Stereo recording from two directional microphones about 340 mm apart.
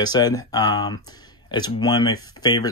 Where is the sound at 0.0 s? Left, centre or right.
Centre.